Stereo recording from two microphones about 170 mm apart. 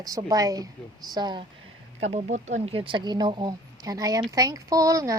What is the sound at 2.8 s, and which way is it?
Speech, 25° right (ahead or behind).